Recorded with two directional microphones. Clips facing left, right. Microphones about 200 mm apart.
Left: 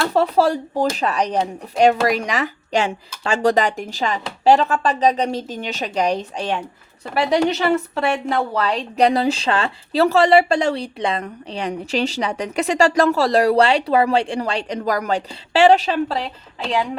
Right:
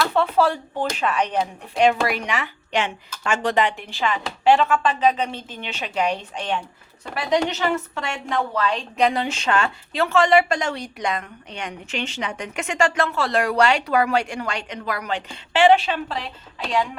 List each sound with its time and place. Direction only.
0.0 s a woman's voice: 40° left (ahead or behind)